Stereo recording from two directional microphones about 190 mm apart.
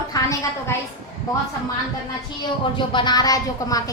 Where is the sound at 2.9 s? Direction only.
20° left (ahead or behind).